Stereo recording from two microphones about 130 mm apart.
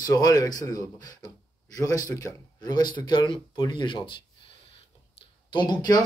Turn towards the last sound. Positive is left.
turn(degrees=35)  # may be behind; listen again after turning